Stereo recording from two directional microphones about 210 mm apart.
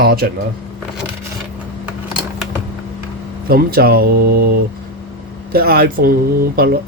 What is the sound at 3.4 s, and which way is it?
Speech, 45° right (ahead or behind).